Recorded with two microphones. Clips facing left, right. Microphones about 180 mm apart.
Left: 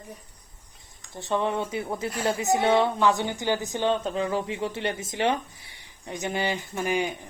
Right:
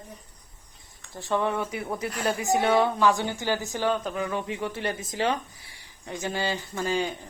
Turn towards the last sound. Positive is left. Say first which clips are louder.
# left 1 dB
turn(degrees=15)  # may be behind; listen again after turning